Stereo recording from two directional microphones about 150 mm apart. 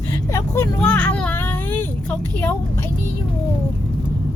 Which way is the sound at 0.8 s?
10° left (ahead or behind).